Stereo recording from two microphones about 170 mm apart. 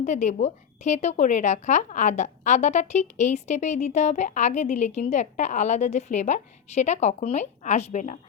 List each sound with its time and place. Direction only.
0.0 s speech: 45° left (ahead or behind)